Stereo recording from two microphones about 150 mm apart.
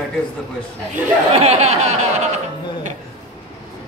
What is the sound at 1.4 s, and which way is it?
Chuckle, 45° right (ahead or behind).